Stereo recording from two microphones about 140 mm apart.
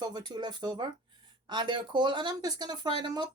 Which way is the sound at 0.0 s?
30° right (ahead or behind).